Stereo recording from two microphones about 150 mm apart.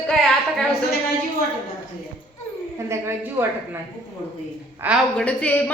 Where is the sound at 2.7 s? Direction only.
15° right (ahead or behind).